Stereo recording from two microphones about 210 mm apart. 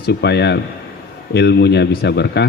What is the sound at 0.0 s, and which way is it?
A man's voice, 50° left (ahead or behind).